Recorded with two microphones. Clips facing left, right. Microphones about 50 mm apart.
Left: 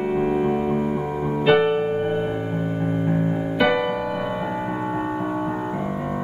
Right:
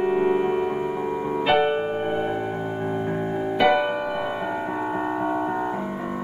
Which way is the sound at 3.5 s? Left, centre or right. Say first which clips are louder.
Right 1 dB; centre.